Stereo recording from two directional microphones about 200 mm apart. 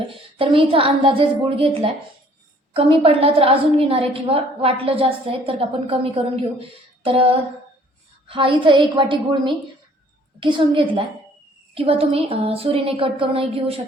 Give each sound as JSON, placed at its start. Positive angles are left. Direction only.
{"t": 0.3, "sound": "a woman's voice", "side_deg": -25}
{"t": 8.3, "sound": "a woman's voice", "side_deg": -25}